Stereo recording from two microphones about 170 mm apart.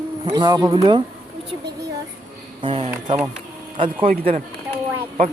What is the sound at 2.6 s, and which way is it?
Speech, 35° right (ahead or behind).